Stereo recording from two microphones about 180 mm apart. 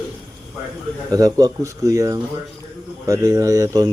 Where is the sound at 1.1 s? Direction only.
20° right (ahead or behind).